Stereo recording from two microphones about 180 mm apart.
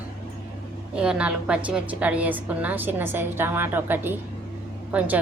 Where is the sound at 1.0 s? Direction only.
5° right (ahead or behind).